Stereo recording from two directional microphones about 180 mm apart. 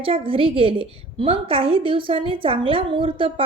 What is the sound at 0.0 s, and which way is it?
A woman's voice, 30° right (ahead or behind).